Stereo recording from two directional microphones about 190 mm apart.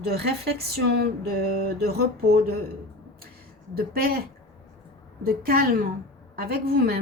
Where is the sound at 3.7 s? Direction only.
50° right (ahead or behind).